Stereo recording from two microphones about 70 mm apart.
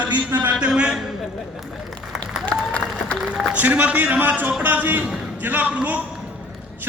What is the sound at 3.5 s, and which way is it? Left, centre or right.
A man's voice, right.